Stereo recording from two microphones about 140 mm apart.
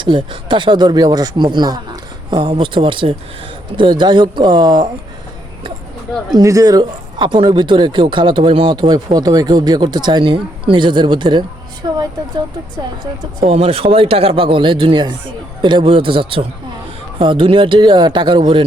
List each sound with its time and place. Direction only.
0.0 s speech: 35° right (ahead or behind)
6.3 s speech: 25° right (ahead or behind)
13.4 s speech: 45° right (ahead or behind)